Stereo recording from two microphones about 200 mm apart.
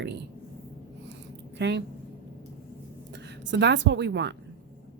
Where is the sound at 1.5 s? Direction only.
60° right (ahead or behind).